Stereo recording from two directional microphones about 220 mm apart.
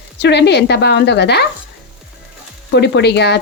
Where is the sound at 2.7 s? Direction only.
50° left (ahead or behind).